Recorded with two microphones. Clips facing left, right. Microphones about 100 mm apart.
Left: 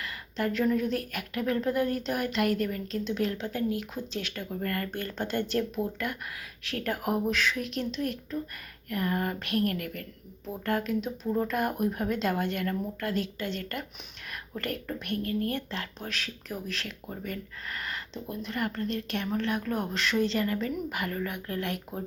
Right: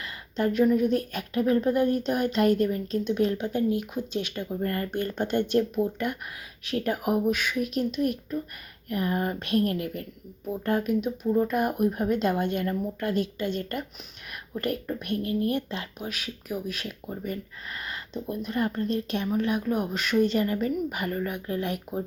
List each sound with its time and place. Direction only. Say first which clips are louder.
0.0 s speech: right 4 dB; 25° right (ahead or behind)
6.7 s speech: right 4 dB; 20° right (ahead or behind)
11.0 s speech: right 5 dB; 5° right (ahead or behind)
11.5 s speech: right 4 dB; 15° right (ahead or behind)